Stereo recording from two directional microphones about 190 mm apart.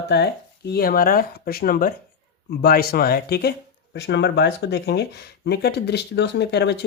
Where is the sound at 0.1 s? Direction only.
60° left (ahead or behind).